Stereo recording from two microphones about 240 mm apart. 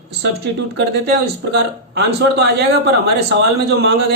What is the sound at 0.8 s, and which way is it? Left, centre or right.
A man's voice, right.